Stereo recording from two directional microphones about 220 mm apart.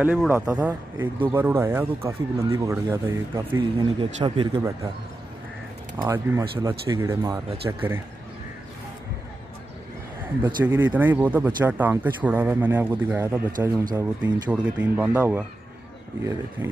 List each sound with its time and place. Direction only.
0.0 s speech: 5° right (ahead or behind)
4.0 s speech: 20° right (ahead or behind)
5.9 s speech: 10° right (ahead or behind)
10.4 s speech: 10° right (ahead or behind)